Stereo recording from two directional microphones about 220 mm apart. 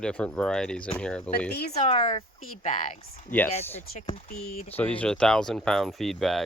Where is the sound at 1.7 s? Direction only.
30° left (ahead or behind).